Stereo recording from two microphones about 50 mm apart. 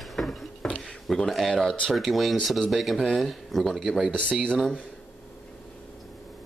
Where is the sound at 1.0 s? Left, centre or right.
Centre.